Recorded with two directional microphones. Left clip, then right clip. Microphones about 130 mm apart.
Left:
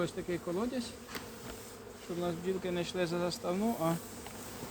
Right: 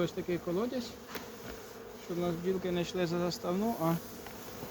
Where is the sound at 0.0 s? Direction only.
10° left (ahead or behind).